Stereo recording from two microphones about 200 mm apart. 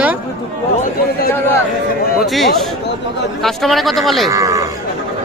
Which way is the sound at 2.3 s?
Centre (ahead or behind).